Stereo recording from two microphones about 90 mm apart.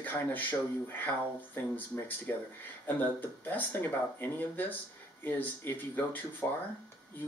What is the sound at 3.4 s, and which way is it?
Speech, 20° left (ahead or behind).